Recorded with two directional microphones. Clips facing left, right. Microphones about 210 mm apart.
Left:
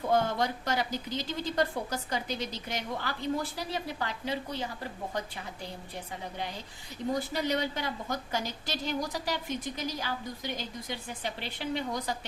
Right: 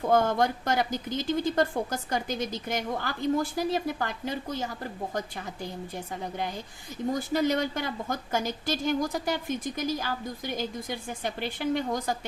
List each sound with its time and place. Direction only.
0.1 s a woman's voice: 50° right (ahead or behind)
7.3 s a woman's voice: 50° right (ahead or behind)